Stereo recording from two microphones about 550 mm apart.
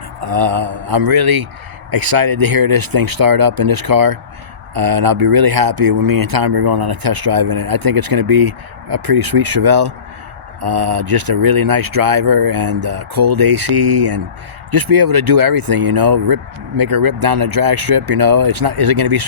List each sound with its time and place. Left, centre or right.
0.3 s speech: right